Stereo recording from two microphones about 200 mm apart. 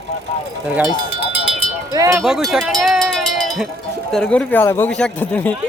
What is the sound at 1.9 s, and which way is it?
Speech, 15° right (ahead or behind).